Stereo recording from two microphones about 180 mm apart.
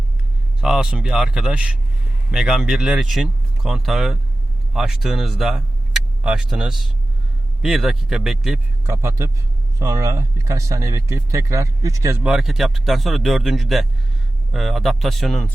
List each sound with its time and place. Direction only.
0.6 s speech: 5° right (ahead or behind)
8.9 s speech: 15° right (ahead or behind)
12.2 s speech: 5° right (ahead or behind)